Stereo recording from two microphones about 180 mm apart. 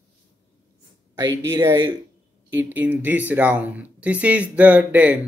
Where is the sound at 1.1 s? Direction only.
20° right (ahead or behind).